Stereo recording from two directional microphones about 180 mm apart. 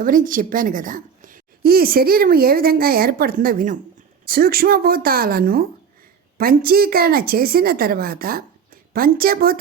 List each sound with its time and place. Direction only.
0.0 s a woman's voice: 50° right (ahead or behind)